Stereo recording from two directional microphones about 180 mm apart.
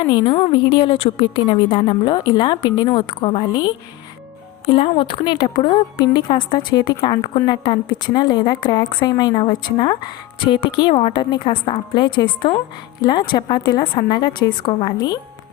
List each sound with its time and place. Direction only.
0.0 s a woman's voice: 25° left (ahead or behind)